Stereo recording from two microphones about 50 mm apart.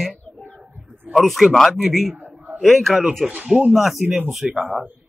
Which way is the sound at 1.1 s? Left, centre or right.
Centre.